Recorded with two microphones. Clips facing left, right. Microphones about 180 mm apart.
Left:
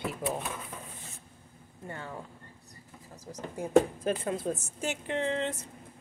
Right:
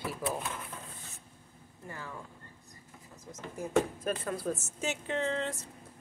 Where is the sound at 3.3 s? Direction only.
30° left (ahead or behind).